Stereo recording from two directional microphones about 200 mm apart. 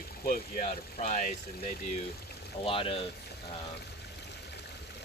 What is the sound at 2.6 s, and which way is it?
Speech, 25° left (ahead or behind).